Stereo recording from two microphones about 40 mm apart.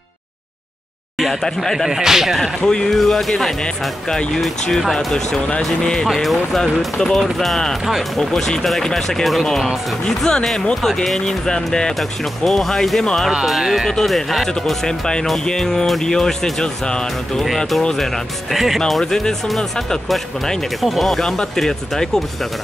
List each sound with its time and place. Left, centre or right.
1.3 s speech: centre
1.9 s speech: centre
2.6 s speech: centre
3.0 s speech: centre
6.0 s speech: centre
12.0 s speech: centre
13.6 s speech: centre
14.0 s speech: centre
14.9 s speech: centre
16.8 s speech: centre
17.9 s speech: centre
20.8 s speech: centre
21.2 s speech: centre